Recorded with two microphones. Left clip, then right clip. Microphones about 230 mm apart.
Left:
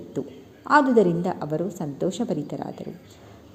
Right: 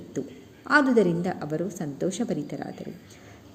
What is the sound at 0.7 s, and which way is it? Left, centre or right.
A woman's voice, centre.